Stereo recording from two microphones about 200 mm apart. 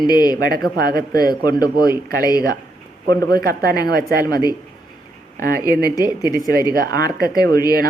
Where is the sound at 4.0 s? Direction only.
50° right (ahead or behind).